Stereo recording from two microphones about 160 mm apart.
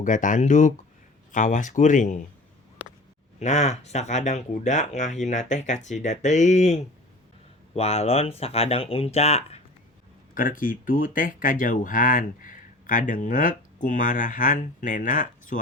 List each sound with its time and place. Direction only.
0.0 s speech: 55° left (ahead or behind)
3.4 s speech: 45° left (ahead or behind)
10.3 s speech: 60° left (ahead or behind)